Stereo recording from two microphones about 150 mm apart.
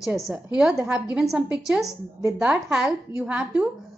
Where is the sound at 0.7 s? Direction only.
20° right (ahead or behind).